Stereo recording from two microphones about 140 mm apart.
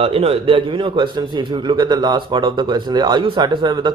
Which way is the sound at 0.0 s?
45° right (ahead or behind).